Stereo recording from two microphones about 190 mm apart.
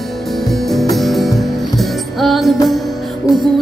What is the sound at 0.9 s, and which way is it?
Music, centre (ahead or behind).